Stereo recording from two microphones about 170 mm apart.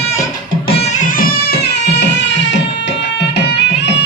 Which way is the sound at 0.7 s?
40° left (ahead or behind).